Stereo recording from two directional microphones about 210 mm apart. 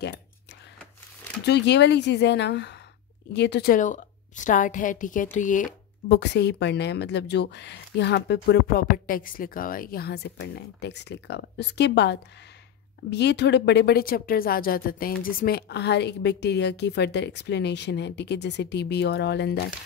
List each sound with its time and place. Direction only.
1.4 s a woman's voice: 55° left (ahead or behind); by 5.7 s 35° left (ahead or behind)
6.0 s speech: 55° left (ahead or behind)